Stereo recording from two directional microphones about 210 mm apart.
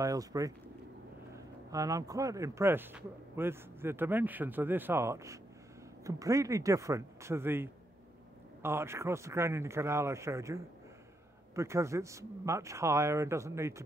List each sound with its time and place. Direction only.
0.0 s speech: 15° right (ahead or behind)